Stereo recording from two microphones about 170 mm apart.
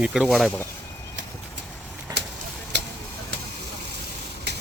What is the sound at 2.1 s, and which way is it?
Vehicle, 20° right (ahead or behind).